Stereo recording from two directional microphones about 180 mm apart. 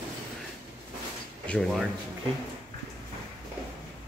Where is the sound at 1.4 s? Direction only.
5° left (ahead or behind).